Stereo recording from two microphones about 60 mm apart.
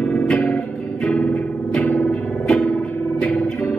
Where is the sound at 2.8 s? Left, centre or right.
Left.